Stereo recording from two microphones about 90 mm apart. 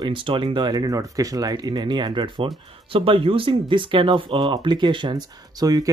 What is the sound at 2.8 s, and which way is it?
Speech, 80° right.